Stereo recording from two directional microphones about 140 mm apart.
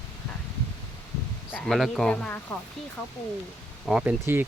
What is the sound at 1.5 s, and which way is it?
Speech, 5° left (ahead or behind).